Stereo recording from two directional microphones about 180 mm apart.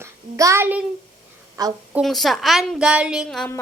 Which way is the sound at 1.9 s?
Centre (ahead or behind).